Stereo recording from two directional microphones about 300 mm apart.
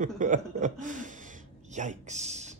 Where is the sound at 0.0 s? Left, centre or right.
Right.